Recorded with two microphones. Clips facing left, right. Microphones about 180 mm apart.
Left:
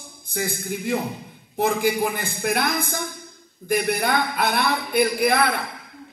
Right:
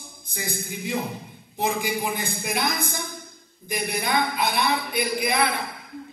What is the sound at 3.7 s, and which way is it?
A man's voice, 50° left (ahead or behind).